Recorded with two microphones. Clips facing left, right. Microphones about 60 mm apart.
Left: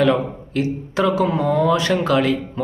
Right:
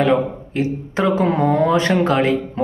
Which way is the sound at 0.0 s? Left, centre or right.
Right.